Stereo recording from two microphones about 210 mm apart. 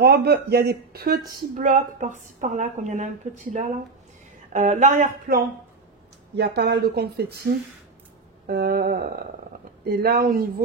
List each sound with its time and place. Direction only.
0.0 s speech: 50° right (ahead or behind)
1.6 s a woman's voice: 35° right (ahead or behind)
6.3 s speech: 50° right (ahead or behind)
8.5 s speech: 45° right (ahead or behind)